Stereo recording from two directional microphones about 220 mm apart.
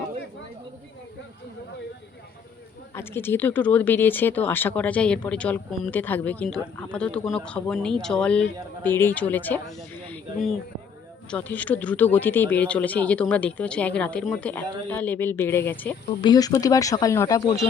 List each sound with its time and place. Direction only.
2.9 s speech: 10° left (ahead or behind)